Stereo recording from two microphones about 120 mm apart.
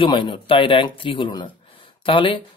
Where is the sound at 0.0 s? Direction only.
40° left (ahead or behind).